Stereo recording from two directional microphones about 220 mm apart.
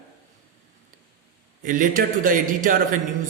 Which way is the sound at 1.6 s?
40° right (ahead or behind).